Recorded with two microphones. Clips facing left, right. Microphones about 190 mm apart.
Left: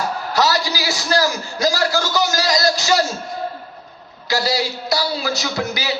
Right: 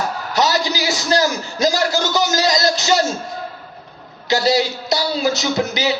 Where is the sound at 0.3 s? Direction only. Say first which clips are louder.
Right 1 dB; 20° right (ahead or behind).